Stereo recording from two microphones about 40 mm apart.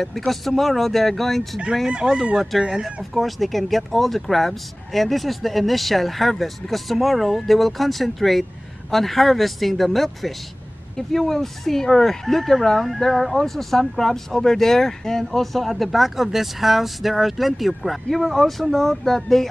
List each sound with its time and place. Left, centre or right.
0.3 s speech: centre
1.9 s speech: right
3.0 s speech: centre